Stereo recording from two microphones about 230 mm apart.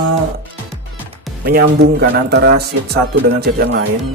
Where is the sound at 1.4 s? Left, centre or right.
Right.